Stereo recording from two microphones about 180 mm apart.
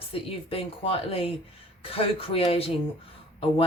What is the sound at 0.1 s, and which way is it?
Speech, 30° left (ahead or behind).